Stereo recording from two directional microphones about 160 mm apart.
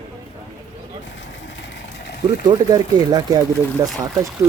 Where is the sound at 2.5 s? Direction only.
25° right (ahead or behind).